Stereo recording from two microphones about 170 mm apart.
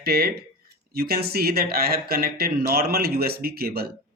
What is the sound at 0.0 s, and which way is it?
Speech, 65° right (ahead or behind).